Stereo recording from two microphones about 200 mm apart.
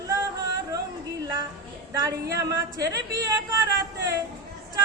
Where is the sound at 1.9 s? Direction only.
15° right (ahead or behind).